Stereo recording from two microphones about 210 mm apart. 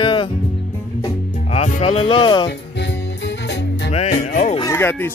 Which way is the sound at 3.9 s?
30° left (ahead or behind).